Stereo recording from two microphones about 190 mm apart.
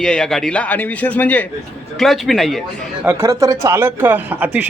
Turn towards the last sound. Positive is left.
turn(degrees=-10)  # may be behind; listen again after turning